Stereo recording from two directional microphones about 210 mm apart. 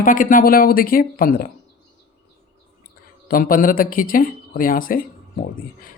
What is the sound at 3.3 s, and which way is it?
Speech, 40° left (ahead or behind).